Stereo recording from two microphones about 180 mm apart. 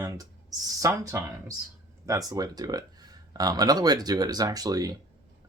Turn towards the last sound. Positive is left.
turn(degrees=-20)  # may be behind; listen again after turning